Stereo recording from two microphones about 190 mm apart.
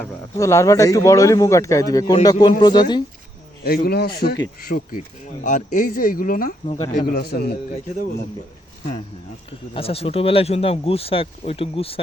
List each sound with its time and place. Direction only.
0.3 s speech: 15° left (ahead or behind)
3.6 s speech: 55° left (ahead or behind)
6.7 s speech: 30° left (ahead or behind)
7.1 s speech: 60° left (ahead or behind)
9.7 s speech: 30° left (ahead or behind)